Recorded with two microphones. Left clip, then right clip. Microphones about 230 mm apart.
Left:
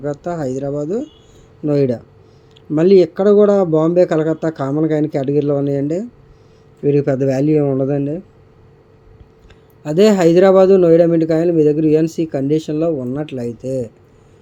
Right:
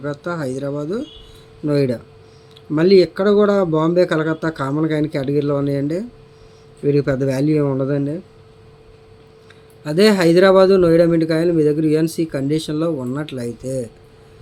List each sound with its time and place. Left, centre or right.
0.0 s a man's voice: centre
9.8 s a man's voice: centre